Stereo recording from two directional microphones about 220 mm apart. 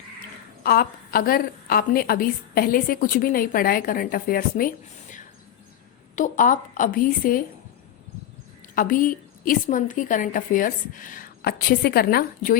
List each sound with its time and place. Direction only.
0.6 s a woman's voice: 45° left (ahead or behind)
6.1 s a woman's voice: 35° left (ahead or behind)
8.7 s a woman's voice: 40° left (ahead or behind)